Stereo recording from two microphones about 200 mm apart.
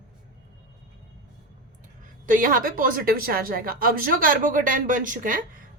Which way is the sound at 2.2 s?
45° right (ahead or behind).